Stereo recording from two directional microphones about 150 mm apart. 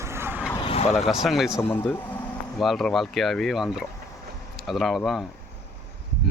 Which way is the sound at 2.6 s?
Centre (ahead or behind).